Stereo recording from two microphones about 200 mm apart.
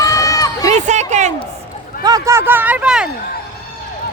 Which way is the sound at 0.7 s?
35° right (ahead or behind).